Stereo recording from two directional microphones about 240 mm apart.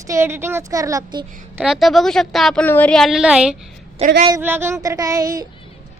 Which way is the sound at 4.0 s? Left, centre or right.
Right.